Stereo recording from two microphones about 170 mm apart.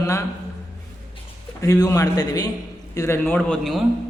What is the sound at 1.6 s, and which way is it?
A man's voice, 20° left (ahead or behind).